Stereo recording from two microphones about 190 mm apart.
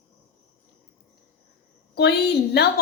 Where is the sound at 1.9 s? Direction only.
60° left (ahead or behind).